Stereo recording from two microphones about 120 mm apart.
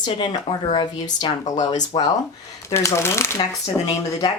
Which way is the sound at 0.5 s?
35° left (ahead or behind).